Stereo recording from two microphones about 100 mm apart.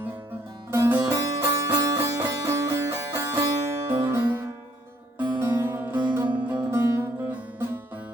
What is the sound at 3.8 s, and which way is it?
Music, 20° right (ahead or behind).